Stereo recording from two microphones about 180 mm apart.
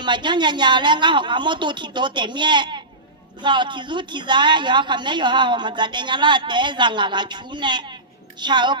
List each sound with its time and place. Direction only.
0.0 s a woman's voice: 25° right (ahead or behind)